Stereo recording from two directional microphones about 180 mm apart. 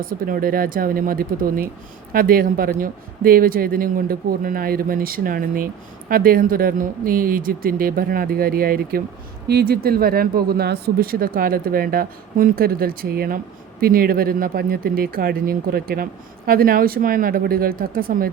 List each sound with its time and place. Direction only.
0.0 s speech: 55° right (ahead or behind)